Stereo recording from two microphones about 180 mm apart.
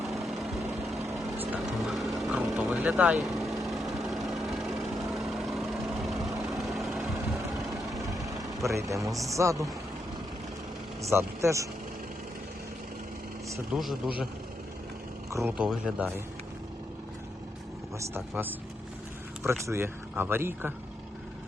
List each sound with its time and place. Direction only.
0.0 s vehicle: centre (ahead or behind)
8.0 s vehicle: 20° right (ahead or behind)
9.0 s speech: 20° right (ahead or behind)
11.1 s speech: 15° right (ahead or behind)
13.7 s speech: 5° right (ahead or behind)
15.3 s speech: 15° right (ahead or behind)
15.5 s speech: 5° right (ahead or behind)
19.4 s speech: 15° right (ahead or behind)